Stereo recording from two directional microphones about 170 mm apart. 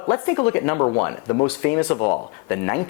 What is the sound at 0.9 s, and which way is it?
Speech, 25° left (ahead or behind).